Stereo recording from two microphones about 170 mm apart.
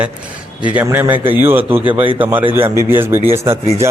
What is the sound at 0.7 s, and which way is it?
A man's voice, 10° right (ahead or behind).